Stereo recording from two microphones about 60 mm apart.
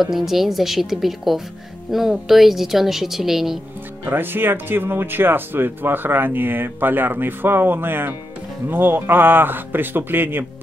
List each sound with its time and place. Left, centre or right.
0.0 s a woman's voice: centre
4.0 s speech: right